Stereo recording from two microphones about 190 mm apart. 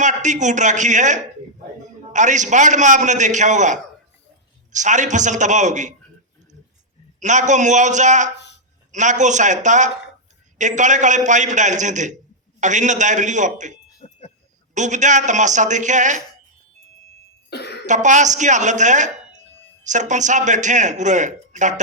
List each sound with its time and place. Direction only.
0.0 s a woman's voice: 40° right (ahead or behind)
7.2 s a man's voice: 40° right (ahead or behind)
14.0 s a sound: 35° left (ahead or behind)
14.8 s a man's voice: 40° right (ahead or behind)
17.5 s cough: 60° left (ahead or behind)
17.8 s a man's voice: 40° right (ahead or behind)